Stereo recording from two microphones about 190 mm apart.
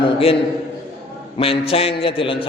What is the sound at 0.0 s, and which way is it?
Speech, 30° left (ahead or behind).